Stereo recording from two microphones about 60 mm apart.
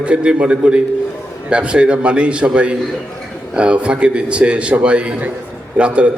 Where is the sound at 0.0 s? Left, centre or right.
Centre.